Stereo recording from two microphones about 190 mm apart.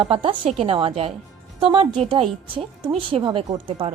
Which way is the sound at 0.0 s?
25° right (ahead or behind).